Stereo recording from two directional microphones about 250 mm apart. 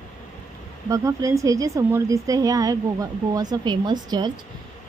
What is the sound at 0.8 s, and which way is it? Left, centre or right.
A woman's voice, centre.